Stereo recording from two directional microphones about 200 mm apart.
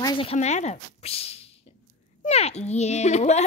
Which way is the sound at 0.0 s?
25° left (ahead or behind).